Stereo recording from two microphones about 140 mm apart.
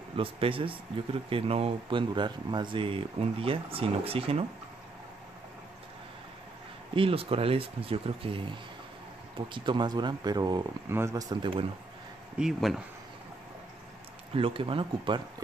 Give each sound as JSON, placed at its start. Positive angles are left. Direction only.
{"t": 0.1, "sound": "speech", "side_deg": -40}
{"t": 7.0, "sound": "speech", "side_deg": -40}
{"t": 9.5, "sound": "speech", "side_deg": -35}
{"t": 12.4, "sound": "speech", "side_deg": 0}
{"t": 14.3, "sound": "speech", "side_deg": -40}